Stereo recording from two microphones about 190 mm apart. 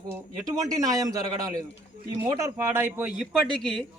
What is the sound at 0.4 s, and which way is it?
A man's voice, 15° right (ahead or behind).